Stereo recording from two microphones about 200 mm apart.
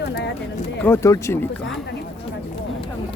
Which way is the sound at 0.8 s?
15° left (ahead or behind).